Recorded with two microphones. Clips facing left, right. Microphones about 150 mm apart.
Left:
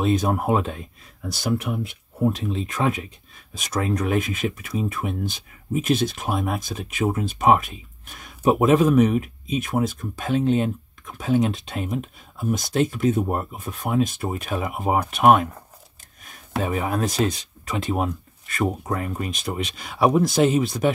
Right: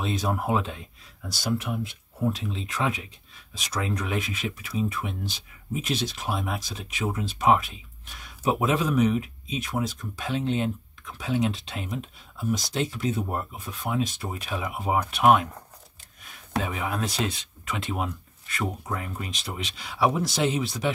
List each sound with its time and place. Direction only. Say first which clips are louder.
0.0 s speech: left 6 dB; 50° left (ahead or behind)
16.6 s speech: left 10 dB; 45° left (ahead or behind)